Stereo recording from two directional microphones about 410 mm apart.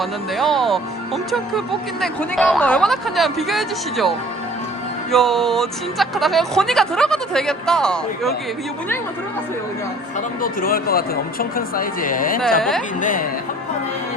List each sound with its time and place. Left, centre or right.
0.0 s speech: centre
5.1 s speech: centre
10.4 s speech: left